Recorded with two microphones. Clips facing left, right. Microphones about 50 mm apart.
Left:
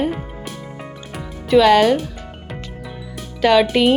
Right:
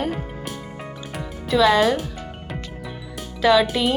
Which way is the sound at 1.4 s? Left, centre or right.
Left.